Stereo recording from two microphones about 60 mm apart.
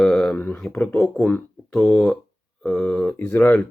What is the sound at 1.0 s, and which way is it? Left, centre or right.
Speech, centre.